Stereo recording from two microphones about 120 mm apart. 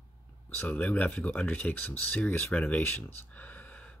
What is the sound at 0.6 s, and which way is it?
Speech, 15° left (ahead or behind).